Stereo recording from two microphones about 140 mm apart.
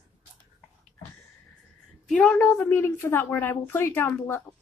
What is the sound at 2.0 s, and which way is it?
A woman's voice, 5° left (ahead or behind).